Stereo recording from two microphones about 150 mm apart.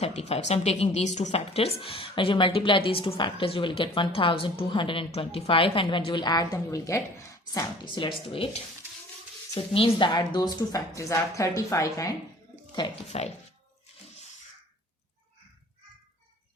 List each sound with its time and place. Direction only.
0.0 s speech: 45° left (ahead or behind); by 12.1 s 20° left (ahead or behind)
13.1 s speech: 45° left (ahead or behind)